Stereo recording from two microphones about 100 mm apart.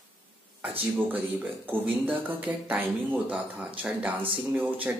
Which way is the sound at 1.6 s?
15° right (ahead or behind).